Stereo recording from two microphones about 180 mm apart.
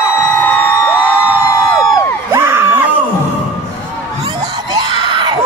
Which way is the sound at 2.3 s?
15° right (ahead or behind).